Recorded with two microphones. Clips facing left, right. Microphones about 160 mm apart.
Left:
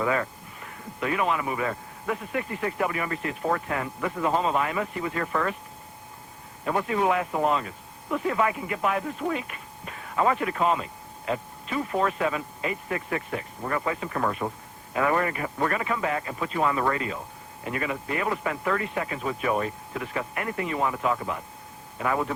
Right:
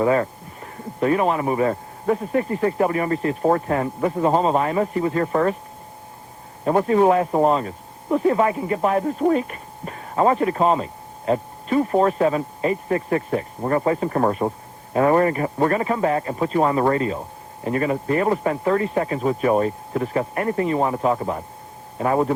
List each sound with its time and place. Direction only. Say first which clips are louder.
0.0 s a man's voice: right 7 dB; 35° right (ahead or behind)
6.7 s a man's voice: right 8 dB; 35° right (ahead or behind)